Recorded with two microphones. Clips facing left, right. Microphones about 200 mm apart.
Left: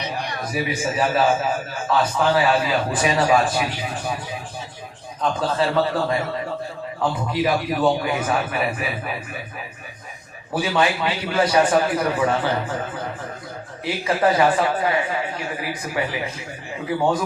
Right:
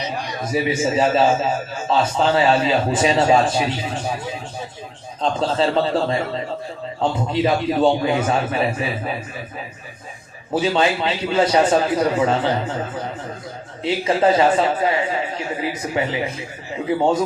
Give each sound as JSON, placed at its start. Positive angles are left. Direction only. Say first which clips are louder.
{"t": 0.0, "sound": "a sound", "louder": "right 1 dB", "side_deg": 60}
{"t": 0.5, "sound": "a man's voice", "louder": "right 5 dB", "side_deg": -25}
{"t": 10.5, "sound": "a man's voice", "louder": "right 3 dB", "side_deg": -25}
{"t": 13.8, "sound": "a man's voice", "louder": "right 3 dB", "side_deg": -25}